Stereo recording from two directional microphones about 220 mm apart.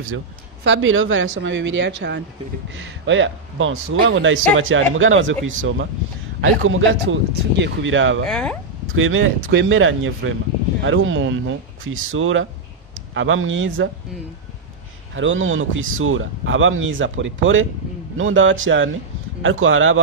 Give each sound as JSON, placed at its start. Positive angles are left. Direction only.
{"t": 0.7, "sound": "speech", "side_deg": -60}
{"t": 8.3, "sound": "speech", "side_deg": 5}
{"t": 8.9, "sound": "speech", "side_deg": -65}
{"t": 15.1, "sound": "speech", "side_deg": -60}